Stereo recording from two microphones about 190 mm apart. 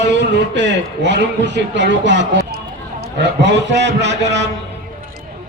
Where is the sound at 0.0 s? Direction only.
65° right (ahead or behind).